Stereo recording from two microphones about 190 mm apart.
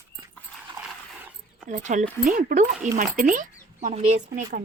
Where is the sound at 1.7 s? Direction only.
40° right (ahead or behind).